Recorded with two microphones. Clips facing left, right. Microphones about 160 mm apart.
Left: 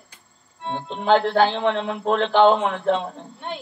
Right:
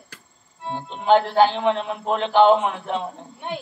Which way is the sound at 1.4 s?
15° right (ahead or behind).